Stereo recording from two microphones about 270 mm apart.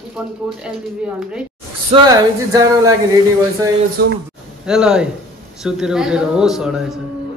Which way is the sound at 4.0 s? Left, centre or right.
Right.